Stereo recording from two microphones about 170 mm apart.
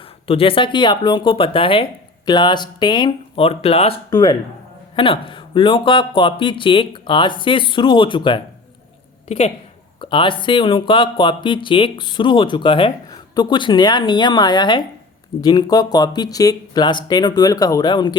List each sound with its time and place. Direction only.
0.3 s speech: 35° left (ahead or behind)
10.0 s speech: 30° left (ahead or behind)